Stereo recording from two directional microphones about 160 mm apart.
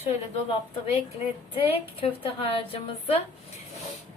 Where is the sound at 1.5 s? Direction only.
35° left (ahead or behind).